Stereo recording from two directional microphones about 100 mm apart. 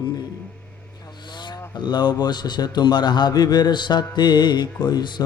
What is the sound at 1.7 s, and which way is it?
Mantra, 50° left (ahead or behind).